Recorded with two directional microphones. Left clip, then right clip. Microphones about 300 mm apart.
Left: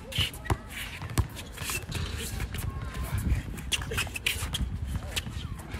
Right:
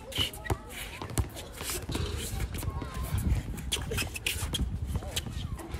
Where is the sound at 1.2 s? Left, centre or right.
Centre.